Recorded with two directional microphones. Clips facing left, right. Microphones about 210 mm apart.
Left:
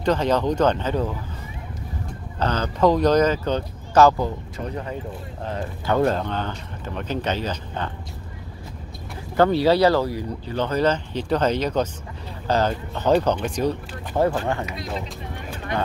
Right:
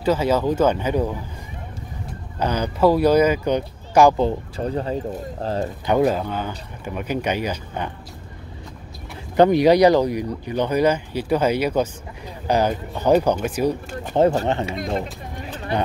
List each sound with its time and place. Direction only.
0.0 s speech: 5° right (ahead or behind)
2.3 s speech: 10° right (ahead or behind)
4.2 s speech: 30° right (ahead or behind)
5.9 s speech: 10° right (ahead or behind)
9.4 s speech: 15° right (ahead or behind)
14.2 s speech: 20° right (ahead or behind)